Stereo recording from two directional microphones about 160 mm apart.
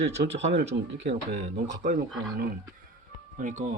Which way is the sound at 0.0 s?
40° right (ahead or behind).